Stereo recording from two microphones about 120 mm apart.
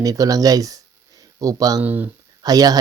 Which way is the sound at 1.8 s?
15° right (ahead or behind).